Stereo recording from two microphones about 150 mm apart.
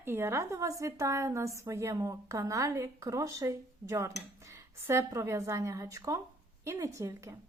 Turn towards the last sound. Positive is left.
turn(degrees=-20)  # may be behind; listen again after turning